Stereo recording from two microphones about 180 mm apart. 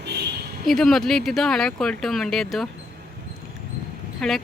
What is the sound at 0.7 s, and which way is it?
Speech, centre (ahead or behind).